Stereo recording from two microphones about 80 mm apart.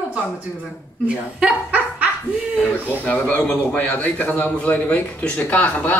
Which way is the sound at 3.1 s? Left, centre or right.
Left.